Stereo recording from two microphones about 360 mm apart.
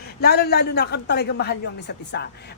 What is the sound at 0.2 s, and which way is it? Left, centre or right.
Speech, left.